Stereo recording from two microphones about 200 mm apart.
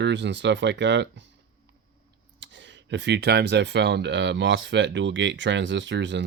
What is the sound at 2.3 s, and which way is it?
Speech, 65° right (ahead or behind).